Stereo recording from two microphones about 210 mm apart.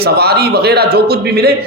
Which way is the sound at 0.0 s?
50° right (ahead or behind).